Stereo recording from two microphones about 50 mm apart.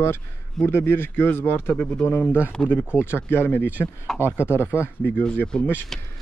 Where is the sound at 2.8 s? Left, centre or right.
Right.